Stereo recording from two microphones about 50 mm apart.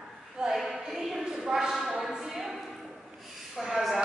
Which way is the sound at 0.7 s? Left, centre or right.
Centre.